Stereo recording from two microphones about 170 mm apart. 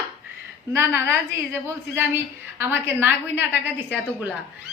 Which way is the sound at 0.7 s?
15° right (ahead or behind).